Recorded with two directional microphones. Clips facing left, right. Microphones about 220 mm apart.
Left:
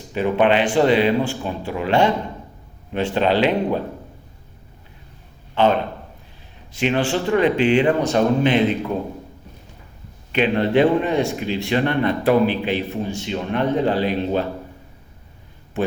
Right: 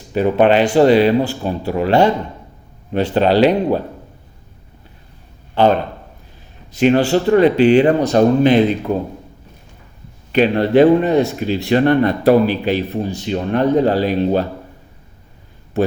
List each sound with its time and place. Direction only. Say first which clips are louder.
0.1 s speech: right 4 dB; 40° right (ahead or behind)
6.7 s speech: right 7 dB; 40° right (ahead or behind)
10.3 s speech: right 5 dB; 40° right (ahead or behind)